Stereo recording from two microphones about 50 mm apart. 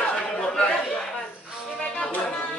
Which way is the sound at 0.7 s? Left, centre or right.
Centre.